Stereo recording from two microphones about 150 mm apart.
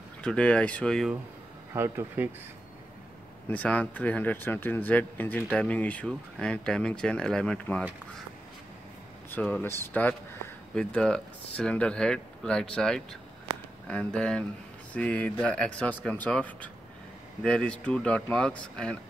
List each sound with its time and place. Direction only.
0.2 s speech: 5° left (ahead or behind)
1.7 s speech: 15° right (ahead or behind)
3.4 s speech: 10° left (ahead or behind)
9.3 s speech: 10° left (ahead or behind)
13.5 s a sound: 45° right (ahead or behind)
13.8 s speech: 5° left (ahead or behind)